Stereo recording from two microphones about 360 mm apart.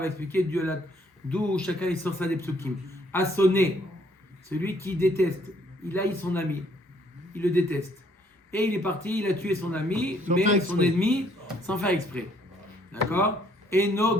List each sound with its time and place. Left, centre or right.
0.0 s speech: centre
10.2 s a man's voice: right
11.0 s speech: centre